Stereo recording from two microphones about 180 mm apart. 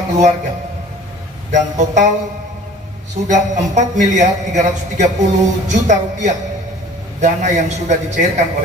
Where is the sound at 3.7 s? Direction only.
40° right (ahead or behind).